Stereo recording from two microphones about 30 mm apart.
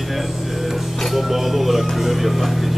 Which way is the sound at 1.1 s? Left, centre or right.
Centre.